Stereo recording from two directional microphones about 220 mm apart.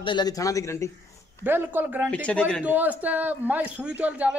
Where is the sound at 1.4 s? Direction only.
10° right (ahead or behind).